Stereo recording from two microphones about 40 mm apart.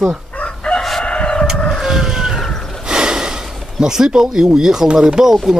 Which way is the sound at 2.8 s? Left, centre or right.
Right.